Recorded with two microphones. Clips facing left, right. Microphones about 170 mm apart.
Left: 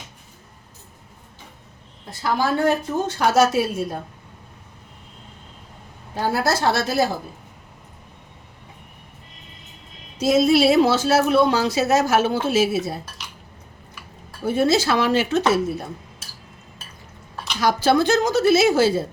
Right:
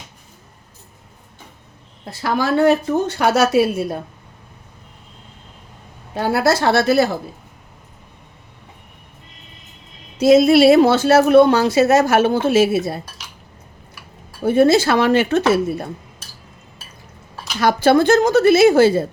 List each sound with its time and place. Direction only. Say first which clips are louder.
2.0 s speech: right 2 dB; 70° right (ahead or behind)
6.1 s speech: right 5 dB; 65° right (ahead or behind)
10.2 s speech: right 6 dB; 65° right (ahead or behind)
14.4 s speech: right 6 dB; 55° right (ahead or behind)
17.6 s speech: right 4 dB; 60° right (ahead or behind)